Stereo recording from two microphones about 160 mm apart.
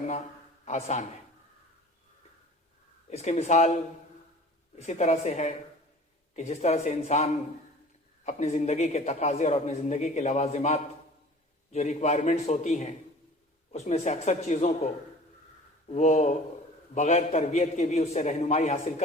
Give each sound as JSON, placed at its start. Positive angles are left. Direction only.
{"t": 0.6, "sound": "a man's voice", "side_deg": 45}
{"t": 3.1, "sound": "a man's voice", "side_deg": 40}
{"t": 4.8, "sound": "a man's voice", "side_deg": 45}
{"t": 15.9, "sound": "a man's voice", "side_deg": 45}